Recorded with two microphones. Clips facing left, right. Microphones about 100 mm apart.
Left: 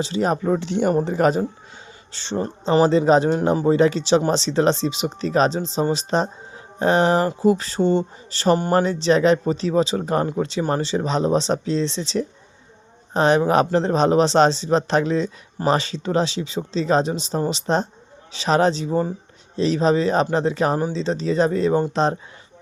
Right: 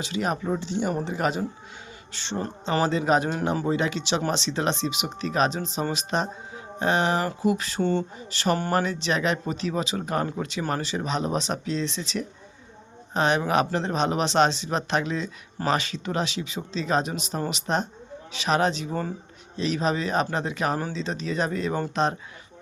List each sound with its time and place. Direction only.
0.0 s speech: 35° left (ahead or behind)
0.4 s speech: 60° left (ahead or behind)
0.9 s speech: 40° left (ahead or behind)
7.8 s speech: 20° left (ahead or behind)
8.3 s speech: 35° left (ahead or behind)
8.5 s speech: 20° left (ahead or behind)
8.8 s speech: 30° left (ahead or behind)